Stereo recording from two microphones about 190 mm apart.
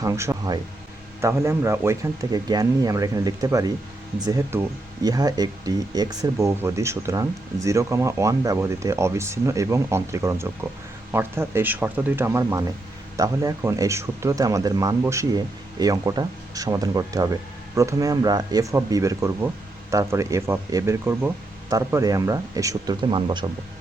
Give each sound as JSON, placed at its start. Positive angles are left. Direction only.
{"t": 0.0, "sound": "speech", "side_deg": -15}